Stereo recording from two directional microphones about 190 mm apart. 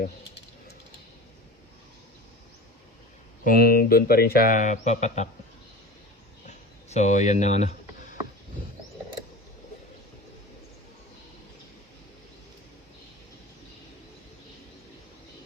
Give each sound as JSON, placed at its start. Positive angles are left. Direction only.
{"t": 3.4, "sound": "speech", "side_deg": 50}
{"t": 6.5, "sound": "speech", "side_deg": 35}